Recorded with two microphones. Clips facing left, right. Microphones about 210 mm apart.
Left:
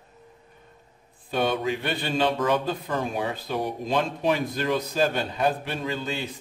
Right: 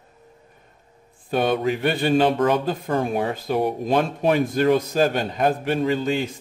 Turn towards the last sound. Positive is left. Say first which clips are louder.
# right 8 dB
turn(degrees=-45)  # may be behind; listen again after turning